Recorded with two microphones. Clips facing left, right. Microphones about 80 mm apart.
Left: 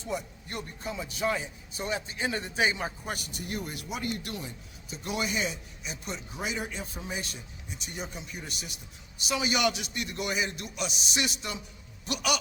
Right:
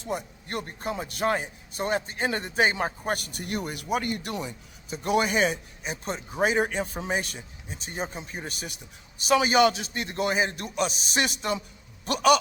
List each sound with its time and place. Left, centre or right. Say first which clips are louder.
0.0 s a man's voice: right 2 dB; right
3.8 s speech: right 9 dB; right
4.3 s speech: right 6 dB; right
4.9 s a man's voice: right 8 dB; right
7.8 s a man's voice: right 6 dB; right